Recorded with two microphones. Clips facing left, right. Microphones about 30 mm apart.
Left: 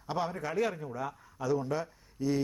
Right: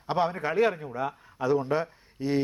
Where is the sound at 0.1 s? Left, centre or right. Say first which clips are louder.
Right 6 dB; right.